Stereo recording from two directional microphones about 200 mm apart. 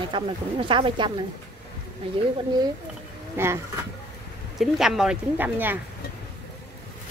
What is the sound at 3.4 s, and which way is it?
Speech, 10° right (ahead or behind).